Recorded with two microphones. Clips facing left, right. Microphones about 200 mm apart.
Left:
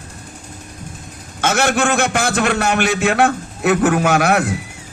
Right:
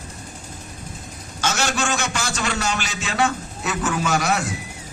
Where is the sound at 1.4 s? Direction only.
55° left (ahead or behind).